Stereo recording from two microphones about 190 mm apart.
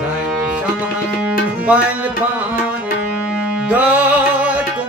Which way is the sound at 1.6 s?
5° right (ahead or behind).